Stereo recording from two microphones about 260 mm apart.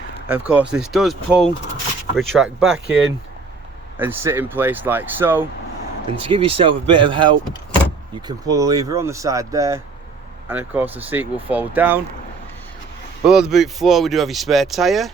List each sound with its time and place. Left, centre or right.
0.3 s speech: centre
3.9 s speech: centre
6.2 s speech: right
8.4 s speech: centre
13.2 s speech: centre